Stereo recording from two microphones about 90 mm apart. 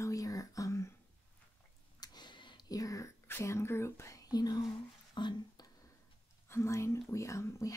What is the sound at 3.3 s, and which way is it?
Whispering, 30° left (ahead or behind).